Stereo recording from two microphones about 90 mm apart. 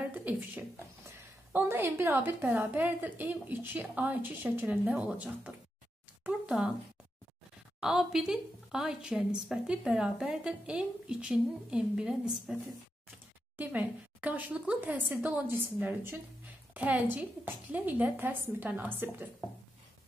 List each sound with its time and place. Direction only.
0.0 s a woman's voice: 20° right (ahead or behind)
6.2 s a sound: 10° right (ahead or behind)
7.8 s a woman's voice: 5° right (ahead or behind)
13.6 s speech: 15° right (ahead or behind)